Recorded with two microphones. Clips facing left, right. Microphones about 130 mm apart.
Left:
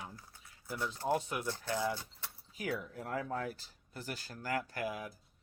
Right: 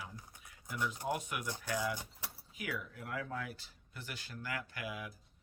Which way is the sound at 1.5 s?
15° right (ahead or behind).